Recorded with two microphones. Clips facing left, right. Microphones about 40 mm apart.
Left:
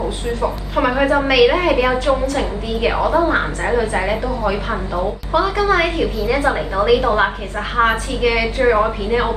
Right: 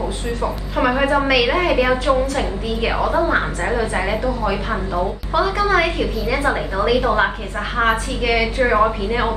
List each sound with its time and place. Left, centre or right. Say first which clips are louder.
0.7 s a woman's voice: left 1 dB; centre